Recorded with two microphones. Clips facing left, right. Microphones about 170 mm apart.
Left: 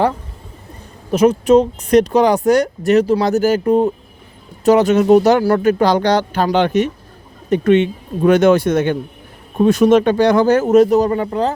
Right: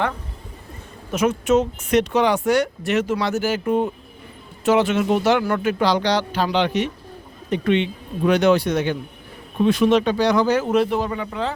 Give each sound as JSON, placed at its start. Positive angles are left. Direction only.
{"t": 1.1, "sound": "speech", "side_deg": 35}